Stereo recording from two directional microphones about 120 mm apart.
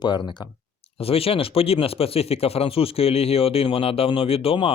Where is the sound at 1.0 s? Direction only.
55° left (ahead or behind).